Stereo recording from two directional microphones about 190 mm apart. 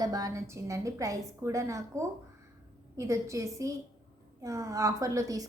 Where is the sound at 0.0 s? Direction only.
20° right (ahead or behind).